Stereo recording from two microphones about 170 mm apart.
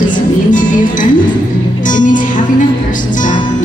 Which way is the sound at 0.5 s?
50° left (ahead or behind).